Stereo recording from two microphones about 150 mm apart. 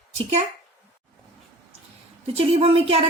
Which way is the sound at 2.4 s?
40° right (ahead or behind).